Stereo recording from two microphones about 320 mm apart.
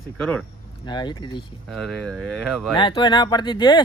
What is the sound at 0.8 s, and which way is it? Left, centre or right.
Speech, centre.